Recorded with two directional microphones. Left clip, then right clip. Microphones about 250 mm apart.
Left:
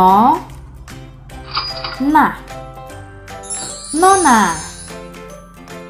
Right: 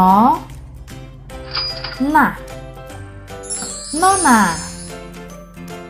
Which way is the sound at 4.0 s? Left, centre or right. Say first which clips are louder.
Left 2 dB; right.